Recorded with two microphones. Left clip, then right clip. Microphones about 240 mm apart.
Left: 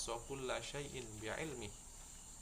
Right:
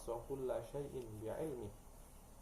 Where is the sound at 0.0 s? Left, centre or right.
Left.